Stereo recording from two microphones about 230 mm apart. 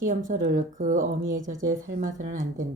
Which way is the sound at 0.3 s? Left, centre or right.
Right.